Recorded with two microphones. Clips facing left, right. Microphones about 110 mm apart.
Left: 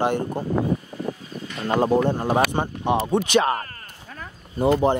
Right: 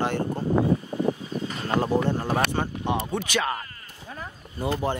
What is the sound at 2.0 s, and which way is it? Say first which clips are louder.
Speech: left 4 dB; 15° left (ahead or behind).